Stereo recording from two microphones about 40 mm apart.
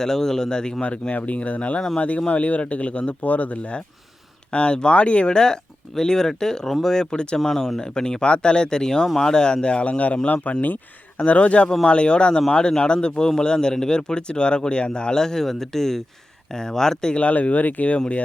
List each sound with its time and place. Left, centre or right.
0.0 s speech: centre
0.9 s a man's voice: left
7.3 s a man's voice: centre; by 10.0 s left
10.2 s a man's voice: left; by 17.2 s centre
17.2 s speech: left